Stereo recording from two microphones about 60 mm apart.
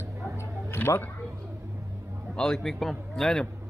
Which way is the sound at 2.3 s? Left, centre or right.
Centre.